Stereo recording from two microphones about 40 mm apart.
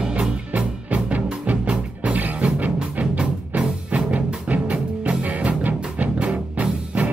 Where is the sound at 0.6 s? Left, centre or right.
Right.